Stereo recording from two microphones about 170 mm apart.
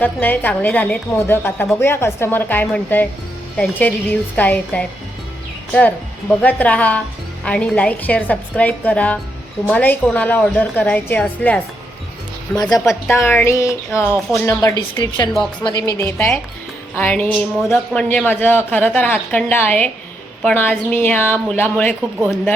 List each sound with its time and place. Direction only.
0.0 s speech: 10° left (ahead or behind)
6.4 s speech: 10° left (ahead or behind)
12.7 s speech: 15° left (ahead or behind)
14.0 s speech: 10° right (ahead or behind)
14.4 s a woman's voice: 20° left (ahead or behind)